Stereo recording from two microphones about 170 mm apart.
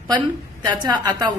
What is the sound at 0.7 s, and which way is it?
Speech, 25° right (ahead or behind).